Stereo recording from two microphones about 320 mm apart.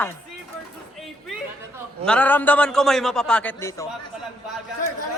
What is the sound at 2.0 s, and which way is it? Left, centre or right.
Speech, centre.